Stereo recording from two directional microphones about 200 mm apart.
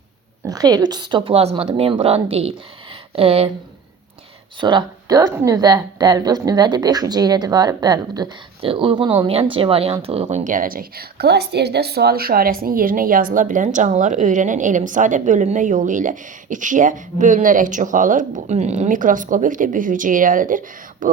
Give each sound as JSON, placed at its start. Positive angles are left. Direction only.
{"t": 0.4, "sound": "speech", "side_deg": -20}
{"t": 4.6, "sound": "a woman's voice", "side_deg": -20}